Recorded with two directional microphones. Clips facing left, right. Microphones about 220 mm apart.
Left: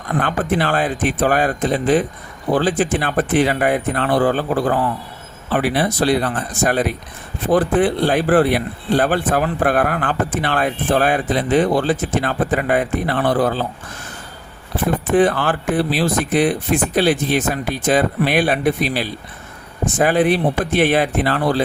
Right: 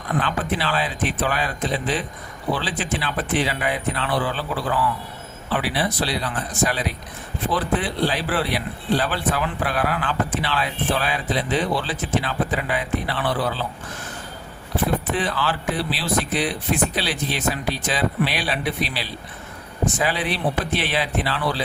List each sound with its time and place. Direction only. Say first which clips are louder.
0.2 s speech: left 7 dB; 50° left (ahead or behind)
15.1 s speech: left 9 dB; 50° left (ahead or behind)